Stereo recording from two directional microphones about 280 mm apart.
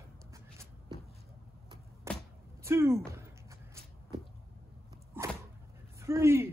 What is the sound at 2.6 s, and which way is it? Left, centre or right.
Speech, centre.